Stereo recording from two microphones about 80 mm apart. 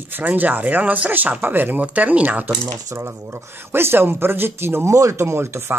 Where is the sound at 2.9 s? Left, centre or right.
Right.